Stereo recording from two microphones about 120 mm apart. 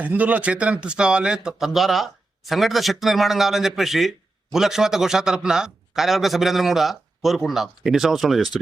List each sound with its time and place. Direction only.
0.0 s speech: 15° right (ahead or behind)